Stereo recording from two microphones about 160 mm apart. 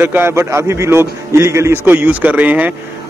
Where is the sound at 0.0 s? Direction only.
15° right (ahead or behind).